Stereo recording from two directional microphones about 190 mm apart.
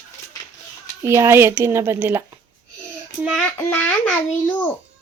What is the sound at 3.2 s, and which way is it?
Child singing, centre (ahead or behind).